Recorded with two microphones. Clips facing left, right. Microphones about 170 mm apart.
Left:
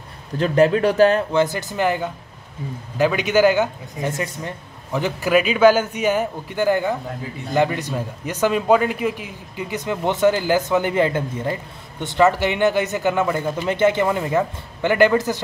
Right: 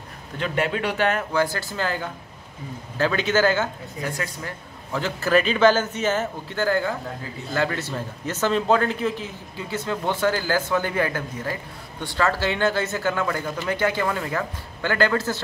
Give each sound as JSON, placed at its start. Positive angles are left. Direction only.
{"t": 0.4, "sound": "a man's voice", "side_deg": 40}